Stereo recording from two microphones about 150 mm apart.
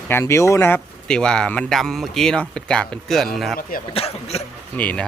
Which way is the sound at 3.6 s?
70° left (ahead or behind).